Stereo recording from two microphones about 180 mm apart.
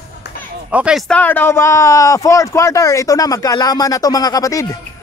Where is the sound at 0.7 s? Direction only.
5° right (ahead or behind).